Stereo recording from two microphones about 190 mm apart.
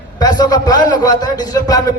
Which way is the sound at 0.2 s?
20° left (ahead or behind).